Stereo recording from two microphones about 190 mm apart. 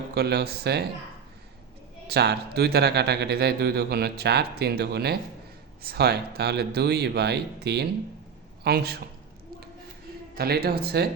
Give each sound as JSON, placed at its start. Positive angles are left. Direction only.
{"t": 0.1, "sound": "speech", "side_deg": -55}
{"t": 2.0, "sound": "speech", "side_deg": -60}
{"t": 10.3, "sound": "speech", "side_deg": -55}